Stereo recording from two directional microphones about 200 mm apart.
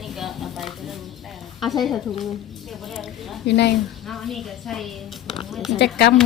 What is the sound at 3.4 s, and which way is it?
Speech, 55° left (ahead or behind).